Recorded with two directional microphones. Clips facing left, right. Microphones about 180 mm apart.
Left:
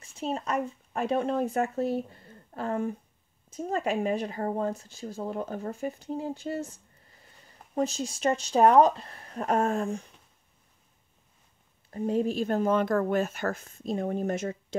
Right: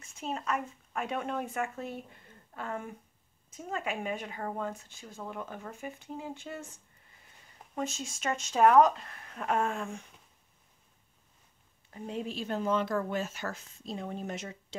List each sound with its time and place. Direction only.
0.0 s speech: 30° left (ahead or behind)
11.9 s speech: 45° left (ahead or behind)